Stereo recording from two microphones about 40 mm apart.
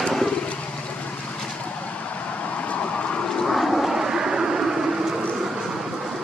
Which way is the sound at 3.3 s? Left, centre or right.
Centre.